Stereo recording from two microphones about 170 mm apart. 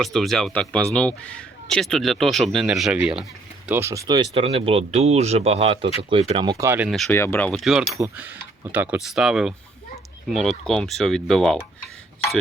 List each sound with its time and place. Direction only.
0.0 s speech: centre (ahead or behind)
3.7 s speech: 15° right (ahead or behind)
6.7 s speech: 10° right (ahead or behind)
7.1 s speech: 15° left (ahead or behind)